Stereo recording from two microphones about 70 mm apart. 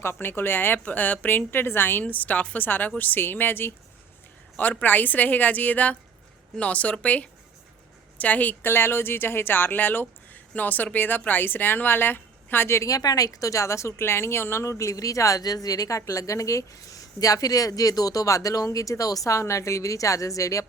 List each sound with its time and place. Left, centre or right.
0.0 s a woman's voice: left
4.8 s a woman's voice: left
8.7 s a woman's voice: left
12.9 s speech: left